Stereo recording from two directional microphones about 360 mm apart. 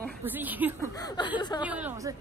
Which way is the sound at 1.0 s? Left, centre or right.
Centre.